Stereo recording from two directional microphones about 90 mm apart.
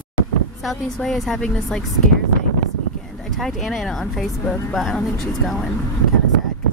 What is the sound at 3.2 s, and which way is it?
Speech, centre (ahead or behind).